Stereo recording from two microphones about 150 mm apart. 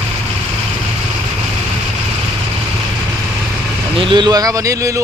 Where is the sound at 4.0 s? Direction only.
30° right (ahead or behind).